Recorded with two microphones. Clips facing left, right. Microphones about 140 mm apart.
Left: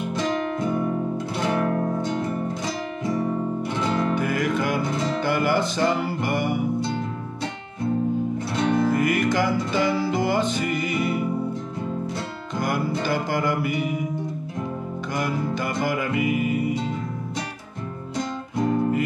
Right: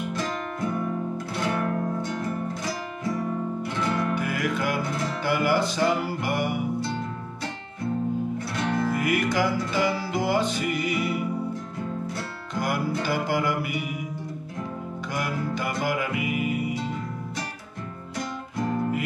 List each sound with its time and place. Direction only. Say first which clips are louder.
0.1 s music: left 5 dB; 20° left (ahead or behind)
3.7 s music: left 2 dB; 20° left (ahead or behind)
4.1 s music: left 4 dB; 5° right (ahead or behind)
8.5 s music: left 5 dB; 20° left (ahead or behind)
8.9 s music: left 3 dB; 5° right (ahead or behind)
13.0 s music: left 1 dB; 5° right (ahead or behind)
15.1 s music: left 3 dB; 5° right (ahead or behind)